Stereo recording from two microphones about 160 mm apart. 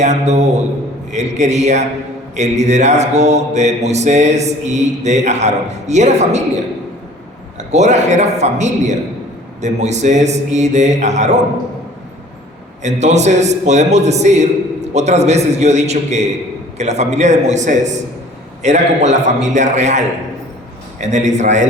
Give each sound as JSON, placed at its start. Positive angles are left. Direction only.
{"t": 0.0, "sound": "mantra", "side_deg": -45}
{"t": 7.7, "sound": "mantra", "side_deg": -45}
{"t": 12.8, "sound": "mantra", "side_deg": -45}